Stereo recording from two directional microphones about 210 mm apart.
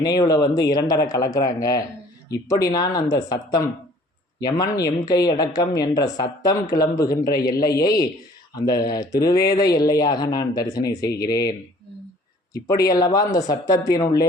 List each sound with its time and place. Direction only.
0.0 s speech: 20° left (ahead or behind)
11.0 s speech: 50° left (ahead or behind)
12.5 s speech: 15° left (ahead or behind)